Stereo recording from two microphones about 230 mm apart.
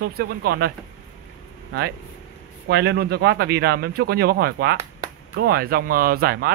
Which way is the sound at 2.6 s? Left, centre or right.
Right.